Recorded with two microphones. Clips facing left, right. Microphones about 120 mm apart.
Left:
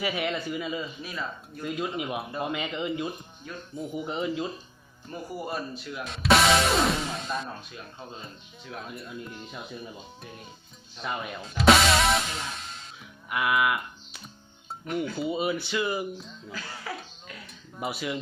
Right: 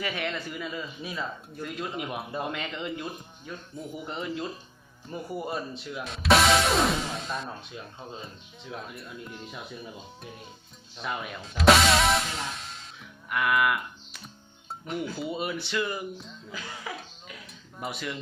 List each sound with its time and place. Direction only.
0.0 s a man's voice: 5° left (ahead or behind)
5.1 s speech: 25° right (ahead or behind)
6.1 s speech: centre (ahead or behind)
9.0 s speech: centre (ahead or behind)
11.0 s speech: centre (ahead or behind)
13.3 s a sound: 5° left (ahead or behind)
14.8 s speech: centre (ahead or behind)
16.5 s speech: 15° right (ahead or behind)
17.7 s a man's voice: 5° left (ahead or behind)